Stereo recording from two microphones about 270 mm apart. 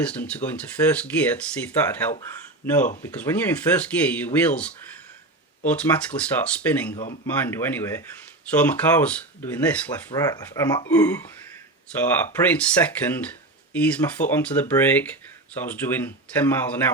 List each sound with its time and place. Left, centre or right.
0.0 s speech: centre
6.9 s speech: left
7.4 s speech: centre